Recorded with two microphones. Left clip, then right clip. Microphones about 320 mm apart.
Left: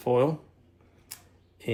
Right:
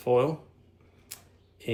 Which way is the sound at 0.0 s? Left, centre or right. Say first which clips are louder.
Even; centre.